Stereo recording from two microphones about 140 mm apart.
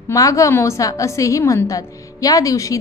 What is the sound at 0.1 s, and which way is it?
A woman's voice, 25° left (ahead or behind).